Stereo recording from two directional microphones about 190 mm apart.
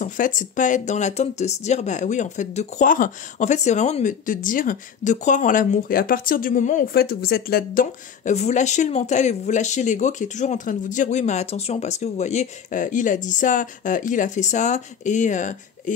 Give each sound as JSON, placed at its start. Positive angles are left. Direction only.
{"t": 0.0, "sound": "speech", "side_deg": 40}